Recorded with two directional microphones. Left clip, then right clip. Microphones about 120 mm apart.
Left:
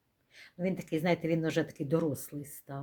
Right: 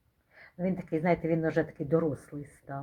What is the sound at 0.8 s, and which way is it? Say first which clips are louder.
Speech: right 3 dB; 30° left (ahead or behind).